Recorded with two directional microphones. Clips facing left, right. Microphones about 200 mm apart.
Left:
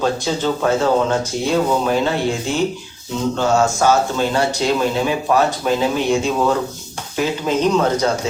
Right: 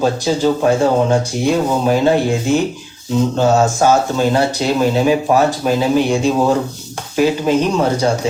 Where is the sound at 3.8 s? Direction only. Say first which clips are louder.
Right 2 dB; 15° right (ahead or behind).